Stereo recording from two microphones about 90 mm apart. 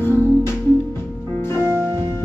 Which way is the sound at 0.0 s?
25° left (ahead or behind).